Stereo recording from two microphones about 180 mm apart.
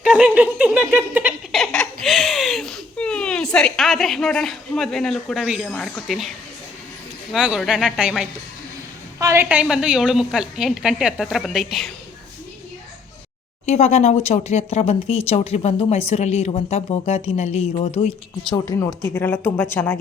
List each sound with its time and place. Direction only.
0.0 s a sound: 5° right (ahead or behind)
7.3 s a woman's voice: 5° right (ahead or behind)
13.7 s speech: 40° left (ahead or behind)
18.5 s speech: 15° left (ahead or behind)